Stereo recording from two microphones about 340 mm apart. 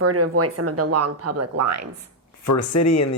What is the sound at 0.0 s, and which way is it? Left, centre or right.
Speech, right.